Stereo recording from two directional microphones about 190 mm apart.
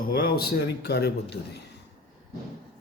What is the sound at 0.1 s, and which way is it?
A man's voice, 55° left (ahead or behind).